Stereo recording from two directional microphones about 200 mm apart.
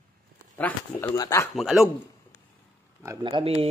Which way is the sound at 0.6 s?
10° left (ahead or behind).